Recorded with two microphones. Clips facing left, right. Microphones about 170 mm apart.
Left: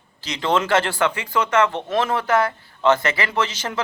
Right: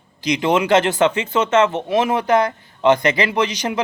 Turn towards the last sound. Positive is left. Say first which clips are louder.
# right 4 dB
turn(degrees=-15)  # may be behind; listen again after turning